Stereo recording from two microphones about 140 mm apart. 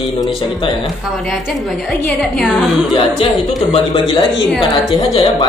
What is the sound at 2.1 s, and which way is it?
Speech, centre (ahead or behind).